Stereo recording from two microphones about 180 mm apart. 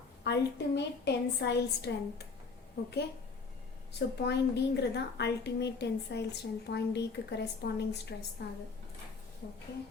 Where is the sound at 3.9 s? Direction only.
70° left (ahead or behind).